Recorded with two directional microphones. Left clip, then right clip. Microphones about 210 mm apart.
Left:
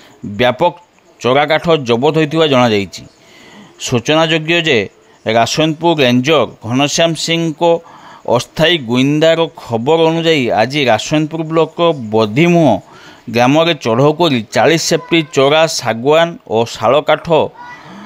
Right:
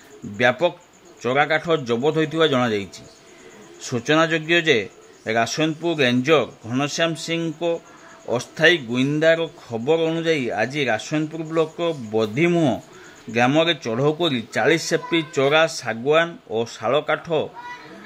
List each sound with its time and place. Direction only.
0.4 s speech: 40° left (ahead or behind)